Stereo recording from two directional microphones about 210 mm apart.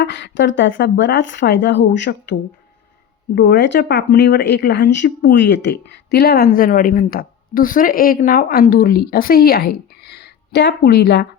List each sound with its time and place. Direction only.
0.0 s a woman's voice: 55° left (ahead or behind)